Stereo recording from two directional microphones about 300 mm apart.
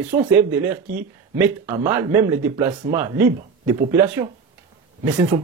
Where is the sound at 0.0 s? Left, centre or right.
Centre.